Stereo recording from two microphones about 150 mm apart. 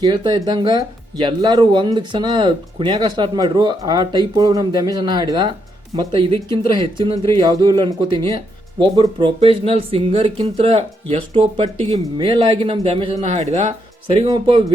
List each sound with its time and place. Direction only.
0.0 s speech: 30° right (ahead or behind)
7.4 s speech: 25° right (ahead or behind); by 14.3 s 50° right (ahead or behind)
14.3 s speech: 35° right (ahead or behind)